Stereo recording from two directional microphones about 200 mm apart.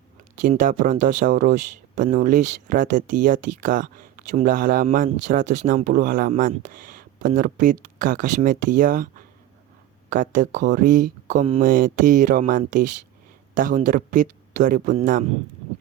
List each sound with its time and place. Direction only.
0.4 s speech: 45° right (ahead or behind)
10.1 s speech: 40° right (ahead or behind)
11.6 s speech: 45° right (ahead or behind)